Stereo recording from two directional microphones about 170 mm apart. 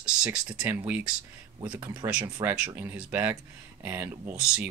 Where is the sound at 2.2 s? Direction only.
20° right (ahead or behind).